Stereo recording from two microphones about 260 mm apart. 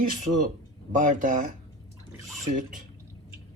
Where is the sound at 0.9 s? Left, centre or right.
Right.